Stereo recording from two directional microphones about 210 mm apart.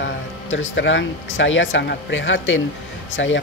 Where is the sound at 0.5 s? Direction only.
65° left (ahead or behind).